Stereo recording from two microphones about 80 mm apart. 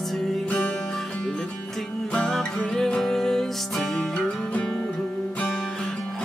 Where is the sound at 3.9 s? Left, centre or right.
Centre.